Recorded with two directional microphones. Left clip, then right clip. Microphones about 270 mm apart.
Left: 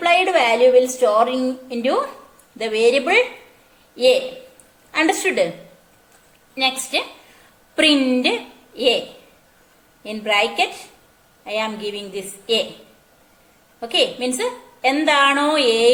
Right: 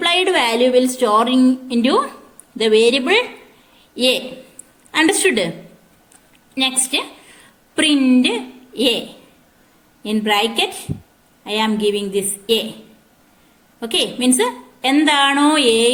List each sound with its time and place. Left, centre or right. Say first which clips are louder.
0.0 s a woman's voice: even; right
6.5 s a woman's voice: right 1 dB; right
10.0 s a woman's voice: right 2 dB; right
13.7 s a woman's voice: left 1 dB; right